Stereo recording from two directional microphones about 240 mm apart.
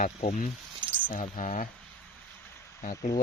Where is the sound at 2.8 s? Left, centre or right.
Left.